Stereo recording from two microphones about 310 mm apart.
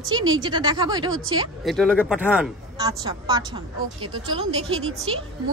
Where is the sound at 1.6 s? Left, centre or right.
Centre.